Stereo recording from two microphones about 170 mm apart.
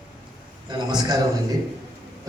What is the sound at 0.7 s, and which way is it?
Speech, 25° right (ahead or behind).